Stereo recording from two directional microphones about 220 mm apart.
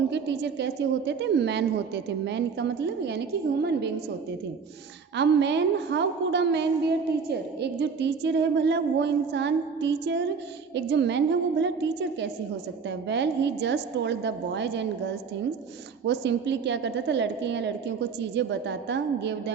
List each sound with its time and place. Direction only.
0.1 s a woman's voice: 50° right (ahead or behind)
5.1 s a woman's voice: 50° right (ahead or behind)
16.0 s a woman's voice: 55° right (ahead or behind)